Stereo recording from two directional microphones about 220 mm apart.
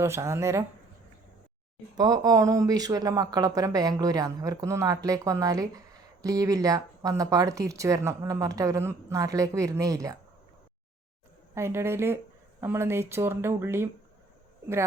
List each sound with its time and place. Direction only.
0.0 s speech: 10° right (ahead or behind)
2.0 s speech: 15° right (ahead or behind)
11.5 s speech: 10° right (ahead or behind)